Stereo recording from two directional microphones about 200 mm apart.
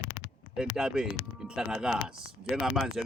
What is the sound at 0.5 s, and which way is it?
Speech, 5° right (ahead or behind).